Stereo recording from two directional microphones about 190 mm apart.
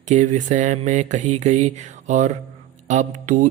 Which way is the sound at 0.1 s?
40° right (ahead or behind).